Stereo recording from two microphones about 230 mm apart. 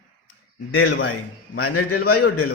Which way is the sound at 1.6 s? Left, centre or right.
Left.